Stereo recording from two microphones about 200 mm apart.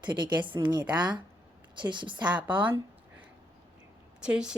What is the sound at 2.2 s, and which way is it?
Speech, 5° right (ahead or behind).